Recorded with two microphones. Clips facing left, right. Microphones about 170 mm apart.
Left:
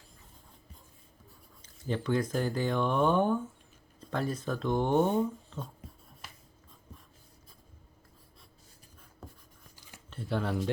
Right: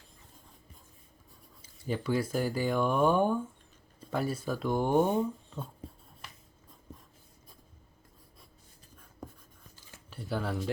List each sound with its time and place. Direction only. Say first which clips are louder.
1.6 s speech: even; 10° right (ahead or behind)
5.8 s writing: right 5 dB; 30° right (ahead or behind)
9.2 s writing: right 4 dB; 15° right (ahead or behind)
10.1 s speech: left 2 dB; centre (ahead or behind)